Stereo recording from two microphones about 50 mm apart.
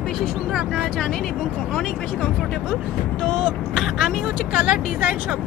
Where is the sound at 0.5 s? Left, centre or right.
Centre.